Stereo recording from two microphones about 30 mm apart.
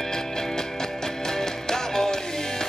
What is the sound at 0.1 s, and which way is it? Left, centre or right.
Music, centre.